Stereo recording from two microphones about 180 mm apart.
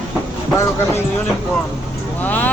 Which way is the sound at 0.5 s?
15° left (ahead or behind).